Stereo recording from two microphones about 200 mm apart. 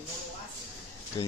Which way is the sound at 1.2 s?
20° left (ahead or behind).